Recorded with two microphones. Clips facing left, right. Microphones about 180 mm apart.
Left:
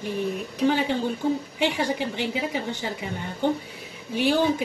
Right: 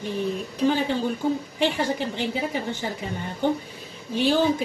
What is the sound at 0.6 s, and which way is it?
Speech, 15° left (ahead or behind).